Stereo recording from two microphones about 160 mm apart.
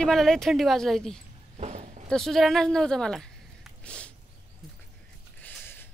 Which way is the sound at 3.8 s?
5° left (ahead or behind).